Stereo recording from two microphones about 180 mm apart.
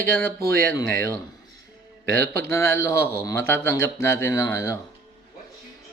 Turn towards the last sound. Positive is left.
turn(degrees=15)  # may be behind; listen again after turning